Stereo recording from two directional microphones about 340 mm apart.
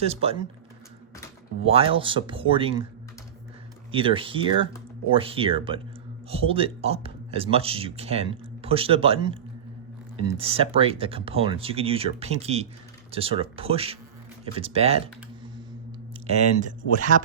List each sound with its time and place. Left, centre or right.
0.0 s speech: centre
1.6 s speech: centre
3.9 s speech: centre
16.2 s speech: centre